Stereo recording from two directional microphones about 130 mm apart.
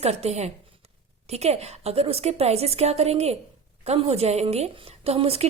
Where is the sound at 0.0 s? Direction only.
55° right (ahead or behind).